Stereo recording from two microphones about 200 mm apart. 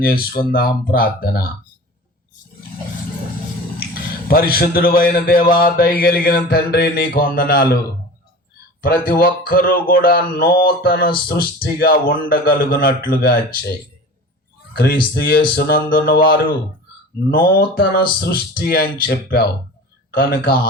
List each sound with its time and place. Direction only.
0.0 s speech: 50° left (ahead or behind)
3.8 s speech: 50° left (ahead or behind)
8.8 s speech: 45° left (ahead or behind)
14.7 s speech: 50° left (ahead or behind)
17.3 s a man's voice: 45° left (ahead or behind)